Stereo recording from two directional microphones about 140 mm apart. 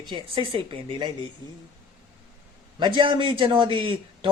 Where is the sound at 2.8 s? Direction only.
35° right (ahead or behind).